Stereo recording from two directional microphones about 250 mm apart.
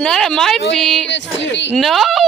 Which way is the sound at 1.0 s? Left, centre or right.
Left.